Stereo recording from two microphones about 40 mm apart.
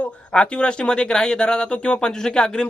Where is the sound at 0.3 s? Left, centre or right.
Left.